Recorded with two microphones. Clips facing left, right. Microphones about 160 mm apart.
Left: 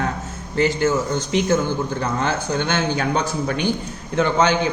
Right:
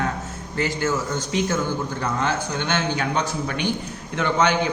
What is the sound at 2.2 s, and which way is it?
A man's voice, 35° left (ahead or behind).